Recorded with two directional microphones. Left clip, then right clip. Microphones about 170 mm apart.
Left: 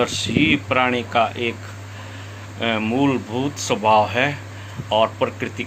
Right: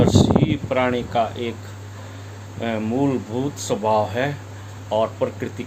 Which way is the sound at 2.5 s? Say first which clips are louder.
Left 3 dB; 10° right (ahead or behind).